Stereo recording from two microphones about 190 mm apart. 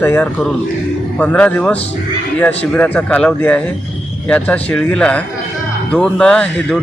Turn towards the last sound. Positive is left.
turn(degrees=5)  # may be behind; listen again after turning